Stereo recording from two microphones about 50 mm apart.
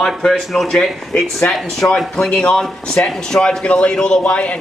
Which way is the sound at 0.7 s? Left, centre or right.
Left.